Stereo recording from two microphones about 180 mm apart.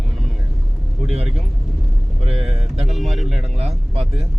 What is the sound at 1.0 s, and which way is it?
Speech, 35° right (ahead or behind).